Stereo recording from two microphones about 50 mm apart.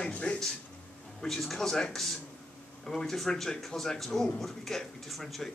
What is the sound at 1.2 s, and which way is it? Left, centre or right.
A man's voice, centre.